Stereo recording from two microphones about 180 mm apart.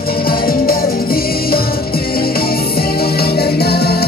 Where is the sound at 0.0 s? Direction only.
55° left (ahead or behind).